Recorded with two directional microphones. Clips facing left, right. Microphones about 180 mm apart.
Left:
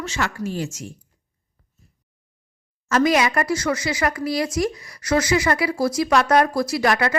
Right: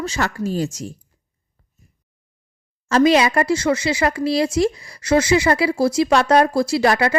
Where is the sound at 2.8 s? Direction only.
30° right (ahead or behind).